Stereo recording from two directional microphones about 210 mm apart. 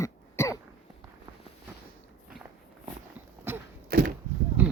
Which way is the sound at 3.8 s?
45° right (ahead or behind).